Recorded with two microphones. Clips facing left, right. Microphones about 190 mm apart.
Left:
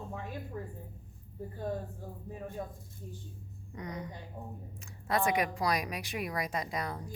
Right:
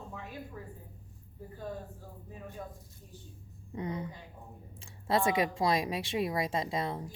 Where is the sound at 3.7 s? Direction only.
30° right (ahead or behind).